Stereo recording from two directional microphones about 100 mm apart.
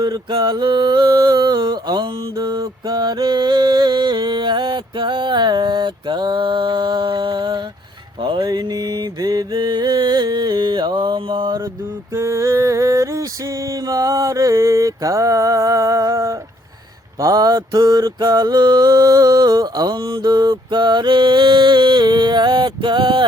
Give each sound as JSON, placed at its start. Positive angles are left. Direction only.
{"t": 0.0, "sound": "mantra", "side_deg": -45}
{"t": 2.3, "sound": "music", "side_deg": -40}
{"t": 8.2, "sound": "mantra", "side_deg": -55}
{"t": 12.1, "sound": "a sound", "side_deg": -30}
{"t": 17.2, "sound": "mantra", "side_deg": -40}
{"t": 20.0, "sound": "mantra", "side_deg": -55}